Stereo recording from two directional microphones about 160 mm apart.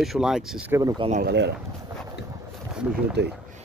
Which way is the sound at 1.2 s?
90° right.